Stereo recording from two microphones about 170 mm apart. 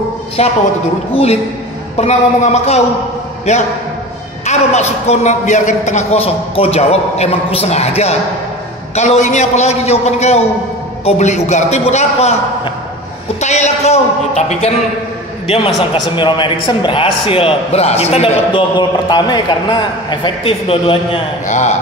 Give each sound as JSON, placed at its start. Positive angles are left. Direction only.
{"t": 0.4, "sound": "a man's voice", "side_deg": 40}
{"t": 21.5, "sound": "speech", "side_deg": 45}